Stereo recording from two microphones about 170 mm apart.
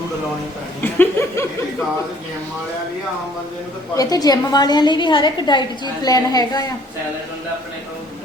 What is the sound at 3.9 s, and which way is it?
A woman's voice, 20° left (ahead or behind).